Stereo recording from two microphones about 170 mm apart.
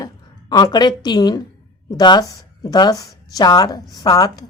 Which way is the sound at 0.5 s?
25° left (ahead or behind).